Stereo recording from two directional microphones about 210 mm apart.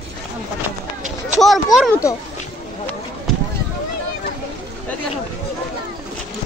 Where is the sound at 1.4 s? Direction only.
Centre (ahead or behind).